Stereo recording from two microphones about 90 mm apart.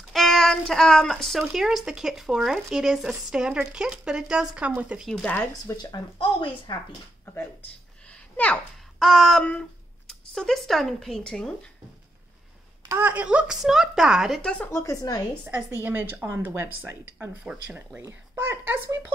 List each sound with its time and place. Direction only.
0.1 s speech: centre (ahead or behind); by 5.0 s 15° right (ahead or behind)
5.0 s speech: centre (ahead or behind)
5.8 s speech: 60° left (ahead or behind)
8.1 s a sound: 15° left (ahead or behind)
9.0 s speech: centre (ahead or behind)
12.9 s speech: 20° right (ahead or behind)
14.4 s speech: 10° left (ahead or behind)
14.7 s a woman's voice: 30° left (ahead or behind)
15.0 s a woman's voice: 45° left (ahead or behind)
15.4 s a woman's voice: 25° right (ahead or behind)